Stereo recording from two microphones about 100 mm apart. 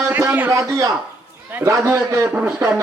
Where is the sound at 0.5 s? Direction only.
35° right (ahead or behind).